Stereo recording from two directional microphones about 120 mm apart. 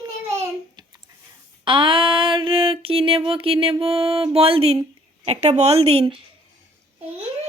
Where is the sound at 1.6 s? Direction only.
45° right (ahead or behind).